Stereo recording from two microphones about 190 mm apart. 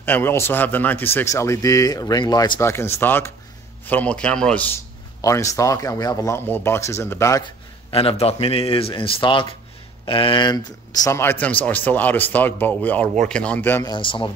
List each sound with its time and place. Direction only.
0.0 s speech: 10° left (ahead or behind)
7.9 s speech: 30° left (ahead or behind); by 13.9 s 10° left (ahead or behind)
13.9 s speech: 25° left (ahead or behind)